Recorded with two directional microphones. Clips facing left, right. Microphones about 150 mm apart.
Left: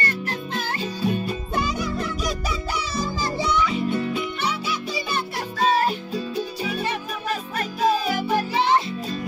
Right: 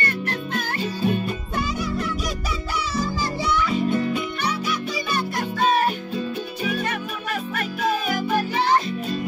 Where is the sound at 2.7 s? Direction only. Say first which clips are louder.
Right 4 dB; 20° left (ahead or behind).